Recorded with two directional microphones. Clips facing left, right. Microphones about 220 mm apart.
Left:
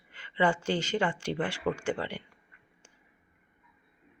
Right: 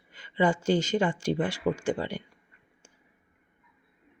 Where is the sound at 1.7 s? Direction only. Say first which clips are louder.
Right 3 dB; 10° right (ahead or behind).